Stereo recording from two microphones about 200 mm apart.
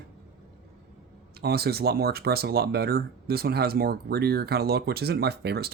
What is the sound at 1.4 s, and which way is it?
Speech, 50° right (ahead or behind).